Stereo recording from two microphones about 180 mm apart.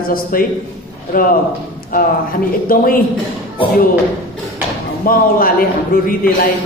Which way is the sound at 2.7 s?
50° left (ahead or behind).